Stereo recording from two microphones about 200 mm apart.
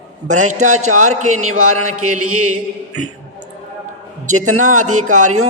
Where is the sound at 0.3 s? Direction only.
35° right (ahead or behind).